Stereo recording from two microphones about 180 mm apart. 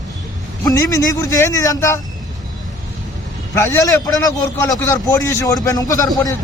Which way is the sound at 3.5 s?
15° left (ahead or behind).